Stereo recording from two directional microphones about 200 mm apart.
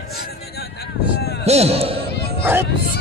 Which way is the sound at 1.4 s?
30° right (ahead or behind).